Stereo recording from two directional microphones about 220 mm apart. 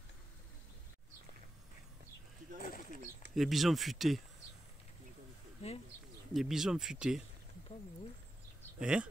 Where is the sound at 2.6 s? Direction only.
40° left (ahead or behind).